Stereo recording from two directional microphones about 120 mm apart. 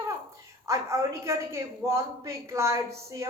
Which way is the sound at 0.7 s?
25° right (ahead or behind).